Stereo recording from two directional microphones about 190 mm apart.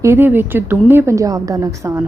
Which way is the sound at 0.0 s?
10° right (ahead or behind).